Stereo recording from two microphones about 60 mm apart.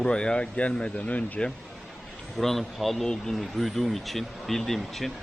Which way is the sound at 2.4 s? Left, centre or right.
Centre.